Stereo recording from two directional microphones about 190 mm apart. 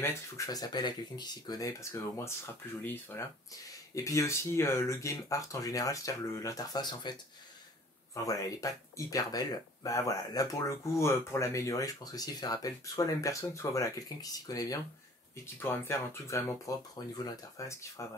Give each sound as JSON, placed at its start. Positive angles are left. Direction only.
{"t": 0.0, "sound": "speech", "side_deg": 15}